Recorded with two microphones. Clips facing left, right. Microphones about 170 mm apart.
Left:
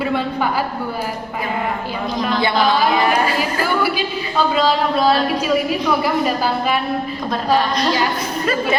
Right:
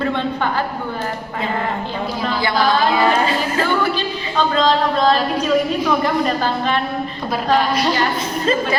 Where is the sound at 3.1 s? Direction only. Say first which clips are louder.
Even; 25° right (ahead or behind).